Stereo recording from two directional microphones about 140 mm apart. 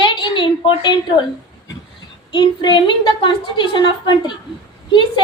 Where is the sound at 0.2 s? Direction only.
35° left (ahead or behind).